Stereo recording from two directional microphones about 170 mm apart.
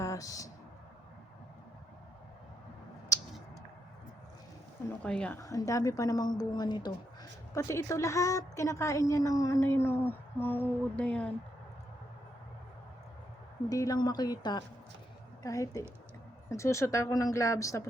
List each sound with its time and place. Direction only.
0.0 s a sound: 20° left (ahead or behind)
5.0 s a woman's voice: 5° left (ahead or behind)
5.4 s a woman's voice: 20° left (ahead or behind)
13.7 s a woman's voice: 20° left (ahead or behind)